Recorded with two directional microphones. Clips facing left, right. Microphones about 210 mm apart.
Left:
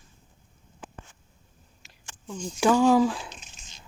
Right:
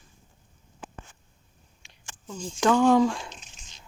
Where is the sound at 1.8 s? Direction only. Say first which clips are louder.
Left 1 dB; 5° left (ahead or behind).